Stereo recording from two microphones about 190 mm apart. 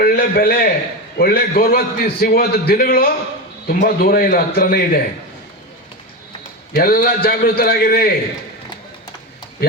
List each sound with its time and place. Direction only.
0.0 s a man's voice: 50° left (ahead or behind)
6.7 s a man's voice: 50° left (ahead or behind)